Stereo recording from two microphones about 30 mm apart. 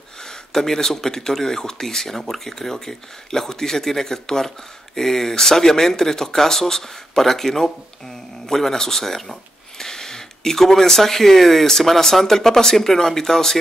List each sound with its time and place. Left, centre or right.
0.2 s speech: centre